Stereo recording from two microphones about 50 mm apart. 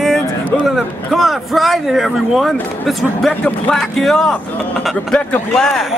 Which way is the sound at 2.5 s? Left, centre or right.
Centre.